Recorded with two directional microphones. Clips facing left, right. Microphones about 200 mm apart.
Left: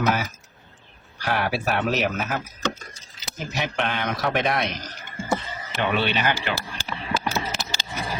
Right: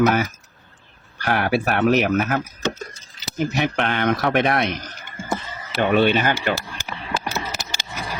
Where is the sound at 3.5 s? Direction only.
60° right (ahead or behind).